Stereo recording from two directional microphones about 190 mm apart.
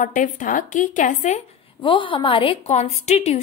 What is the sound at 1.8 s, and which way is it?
A woman's voice, 25° left (ahead or behind).